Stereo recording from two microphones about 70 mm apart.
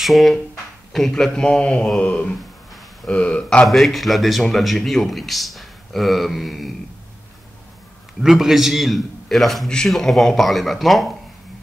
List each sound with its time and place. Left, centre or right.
0.0 s a man's voice: centre
3.6 s a man's voice: centre
8.2 s a man's voice: centre